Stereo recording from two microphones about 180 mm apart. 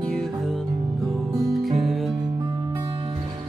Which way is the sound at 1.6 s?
Centre (ahead or behind).